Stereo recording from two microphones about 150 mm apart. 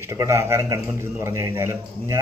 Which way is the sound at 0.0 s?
20° right (ahead or behind).